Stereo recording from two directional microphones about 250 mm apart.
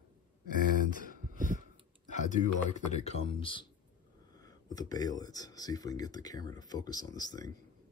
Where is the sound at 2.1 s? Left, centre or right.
Left.